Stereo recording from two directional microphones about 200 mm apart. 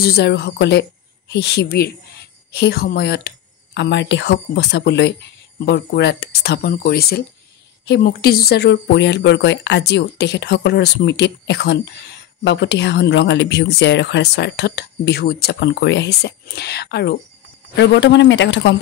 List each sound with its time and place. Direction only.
0.0 s speech: 55° left (ahead or behind)